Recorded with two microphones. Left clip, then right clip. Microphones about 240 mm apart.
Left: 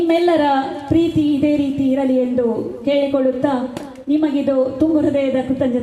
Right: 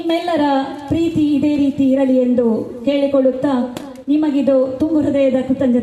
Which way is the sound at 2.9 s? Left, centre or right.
Right.